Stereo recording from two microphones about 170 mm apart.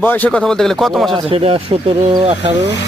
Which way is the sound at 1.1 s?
30° right (ahead or behind).